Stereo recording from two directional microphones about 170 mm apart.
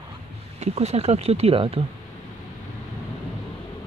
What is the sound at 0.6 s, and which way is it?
Speech, 40° right (ahead or behind).